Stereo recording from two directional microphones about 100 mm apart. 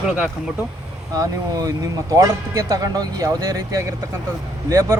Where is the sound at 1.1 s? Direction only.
35° right (ahead or behind).